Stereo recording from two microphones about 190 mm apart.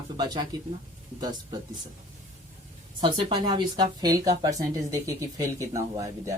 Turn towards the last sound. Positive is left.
turn(degrees=-15)  # may be behind; listen again after turning